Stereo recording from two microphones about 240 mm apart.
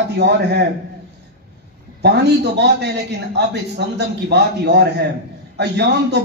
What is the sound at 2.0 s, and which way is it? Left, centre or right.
A man's voice, right.